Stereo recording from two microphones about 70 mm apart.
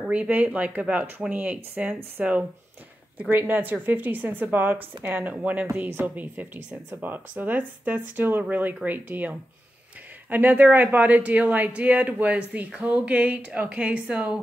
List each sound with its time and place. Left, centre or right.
0.1 s speech: right
5.7 s speech: right